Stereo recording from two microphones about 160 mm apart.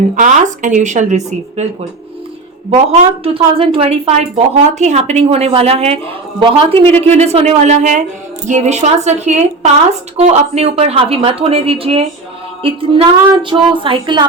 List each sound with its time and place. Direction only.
0.2 s speech: 50° right (ahead or behind)
2.6 s speech: 40° right (ahead or behind)